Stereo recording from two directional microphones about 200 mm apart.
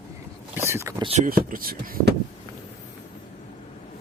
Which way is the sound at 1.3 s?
45° right (ahead or behind).